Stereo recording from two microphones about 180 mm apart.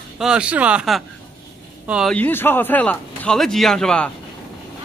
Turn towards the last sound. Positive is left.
turn(degrees=5)  # may be behind; listen again after turning